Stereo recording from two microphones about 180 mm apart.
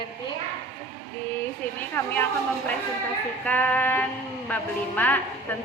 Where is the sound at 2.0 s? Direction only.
10° left (ahead or behind).